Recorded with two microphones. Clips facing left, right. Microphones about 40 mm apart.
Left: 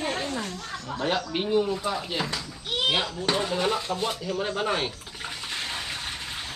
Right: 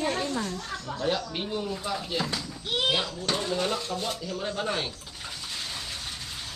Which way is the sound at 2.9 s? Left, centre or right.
Centre.